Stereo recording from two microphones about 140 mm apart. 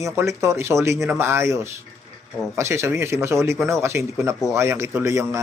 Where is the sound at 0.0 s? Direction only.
20° right (ahead or behind).